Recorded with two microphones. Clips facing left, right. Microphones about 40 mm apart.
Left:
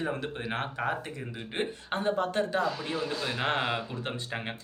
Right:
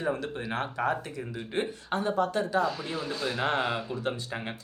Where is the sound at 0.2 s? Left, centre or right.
Left.